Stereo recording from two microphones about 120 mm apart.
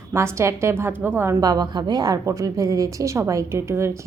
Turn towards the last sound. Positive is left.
turn(degrees=-20)  # may be behind; listen again after turning